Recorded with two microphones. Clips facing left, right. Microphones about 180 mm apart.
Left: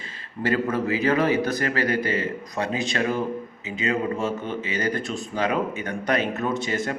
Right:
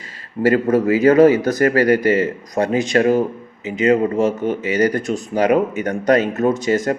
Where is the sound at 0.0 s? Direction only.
40° right (ahead or behind).